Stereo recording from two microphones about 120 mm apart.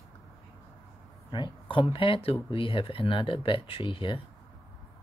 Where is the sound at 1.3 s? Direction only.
40° left (ahead or behind).